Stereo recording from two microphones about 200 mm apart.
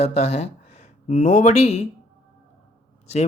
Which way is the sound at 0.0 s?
30° left (ahead or behind).